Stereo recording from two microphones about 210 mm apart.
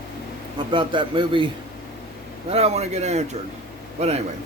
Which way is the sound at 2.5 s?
30° right (ahead or behind).